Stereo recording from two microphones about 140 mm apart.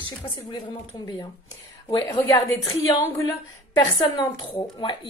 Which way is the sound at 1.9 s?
30° left (ahead or behind).